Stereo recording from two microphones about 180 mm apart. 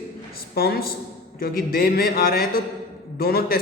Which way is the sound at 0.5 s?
60° left (ahead or behind).